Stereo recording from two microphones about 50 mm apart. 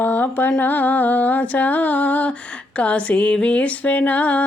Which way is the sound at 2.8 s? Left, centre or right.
Left.